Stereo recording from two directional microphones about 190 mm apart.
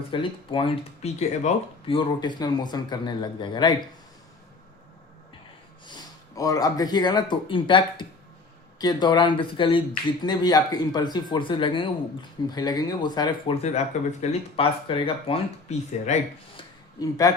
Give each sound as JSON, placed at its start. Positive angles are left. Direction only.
{"t": 0.1, "sound": "speech", "side_deg": 25}
{"t": 5.8, "sound": "speech", "side_deg": 20}
{"t": 16.6, "sound": "a sound", "side_deg": 20}